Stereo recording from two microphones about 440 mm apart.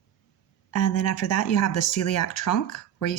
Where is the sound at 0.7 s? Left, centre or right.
Left.